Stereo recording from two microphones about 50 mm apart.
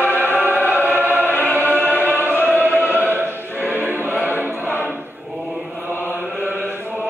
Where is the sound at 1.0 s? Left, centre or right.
Right.